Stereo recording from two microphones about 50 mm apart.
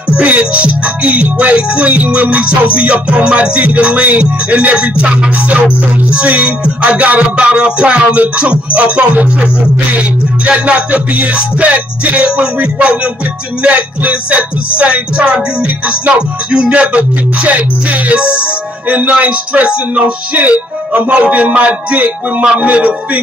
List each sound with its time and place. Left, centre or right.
0.1 s music: right